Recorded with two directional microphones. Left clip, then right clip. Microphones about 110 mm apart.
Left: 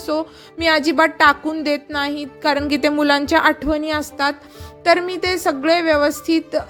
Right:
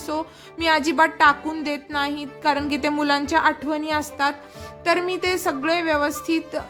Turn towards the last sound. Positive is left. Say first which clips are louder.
# left 6 dB
turn(degrees=45)  # may be behind; listen again after turning